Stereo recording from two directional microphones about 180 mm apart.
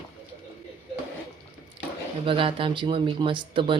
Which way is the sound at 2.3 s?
30° right (ahead or behind).